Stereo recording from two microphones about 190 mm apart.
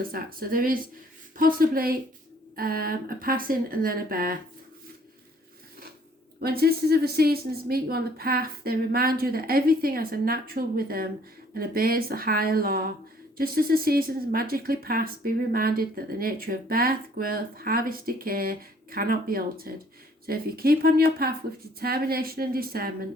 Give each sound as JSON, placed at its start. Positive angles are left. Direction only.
{"t": 0.1, "sound": "speech", "side_deg": -50}
{"t": 6.4, "sound": "speech", "side_deg": -55}